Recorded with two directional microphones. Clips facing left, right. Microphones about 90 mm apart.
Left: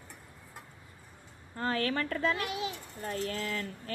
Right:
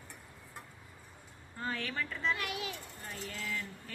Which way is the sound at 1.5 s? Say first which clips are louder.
Left 6 dB; 65° left (ahead or behind).